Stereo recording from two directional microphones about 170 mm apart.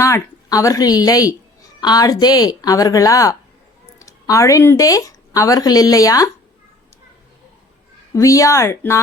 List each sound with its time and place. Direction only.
0.0 s speech: 20° left (ahead or behind)
8.1 s speech: 20° left (ahead or behind)